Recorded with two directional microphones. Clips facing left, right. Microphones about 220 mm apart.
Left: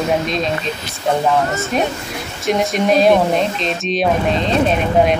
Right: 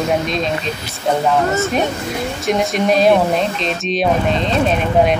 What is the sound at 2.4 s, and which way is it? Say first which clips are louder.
Speech: left 1 dB; centre (ahead or behind).